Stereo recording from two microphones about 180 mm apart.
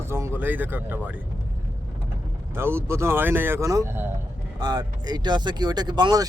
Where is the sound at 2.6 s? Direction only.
15° right (ahead or behind).